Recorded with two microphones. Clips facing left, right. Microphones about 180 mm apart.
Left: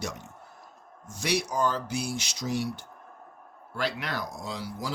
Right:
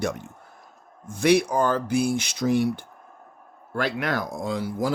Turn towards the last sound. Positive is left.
turn(degrees=-50)  # may be behind; listen again after turning